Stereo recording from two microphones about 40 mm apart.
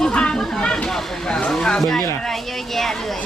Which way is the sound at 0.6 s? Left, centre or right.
Left.